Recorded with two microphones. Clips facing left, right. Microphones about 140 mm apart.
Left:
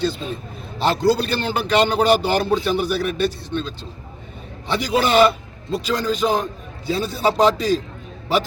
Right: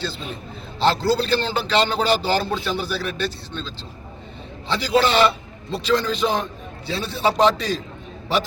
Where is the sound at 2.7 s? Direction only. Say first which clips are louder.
Left 5 dB; 55° left (ahead or behind).